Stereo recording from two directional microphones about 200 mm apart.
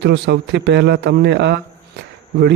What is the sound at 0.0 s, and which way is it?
A man's voice, 60° right (ahead or behind).